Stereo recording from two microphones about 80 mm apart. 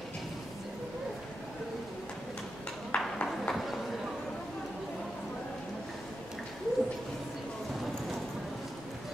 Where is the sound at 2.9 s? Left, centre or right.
Centre.